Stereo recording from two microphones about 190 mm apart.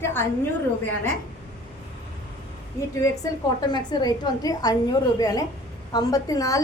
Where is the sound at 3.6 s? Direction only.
20° left (ahead or behind).